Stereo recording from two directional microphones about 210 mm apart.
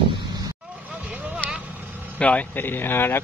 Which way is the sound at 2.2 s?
5° left (ahead or behind).